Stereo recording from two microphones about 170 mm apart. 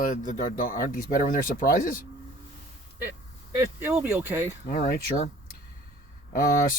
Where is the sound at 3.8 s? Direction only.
10° right (ahead or behind).